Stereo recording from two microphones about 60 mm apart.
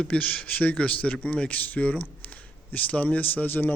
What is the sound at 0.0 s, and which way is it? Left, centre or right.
Speech, left.